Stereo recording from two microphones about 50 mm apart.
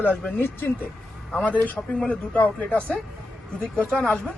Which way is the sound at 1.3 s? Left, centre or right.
Left.